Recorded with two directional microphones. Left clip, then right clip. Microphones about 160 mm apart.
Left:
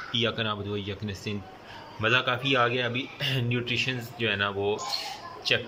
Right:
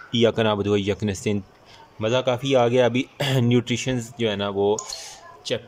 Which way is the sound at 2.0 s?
35° right (ahead or behind).